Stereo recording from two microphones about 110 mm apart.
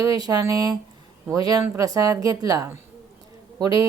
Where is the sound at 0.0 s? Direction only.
35° right (ahead or behind).